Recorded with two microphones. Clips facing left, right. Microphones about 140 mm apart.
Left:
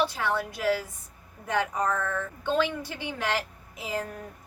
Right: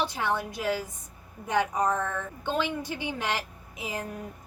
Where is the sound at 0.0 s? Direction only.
20° right (ahead or behind).